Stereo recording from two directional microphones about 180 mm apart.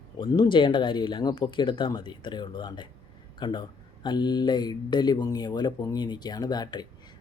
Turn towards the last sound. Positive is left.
turn(degrees=20)  # may be behind; listen again after turning